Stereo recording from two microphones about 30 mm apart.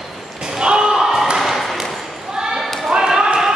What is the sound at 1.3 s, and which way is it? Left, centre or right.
Ping, centre.